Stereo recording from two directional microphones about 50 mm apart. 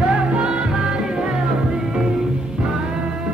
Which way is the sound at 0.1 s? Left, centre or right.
Centre.